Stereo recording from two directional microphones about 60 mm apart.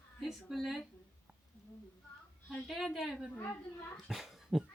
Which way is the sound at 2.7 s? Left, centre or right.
Centre.